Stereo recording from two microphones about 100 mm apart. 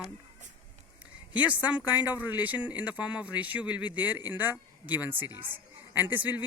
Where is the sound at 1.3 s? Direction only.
15° right (ahead or behind).